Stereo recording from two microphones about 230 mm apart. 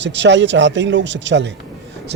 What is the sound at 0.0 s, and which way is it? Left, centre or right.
Speech, right.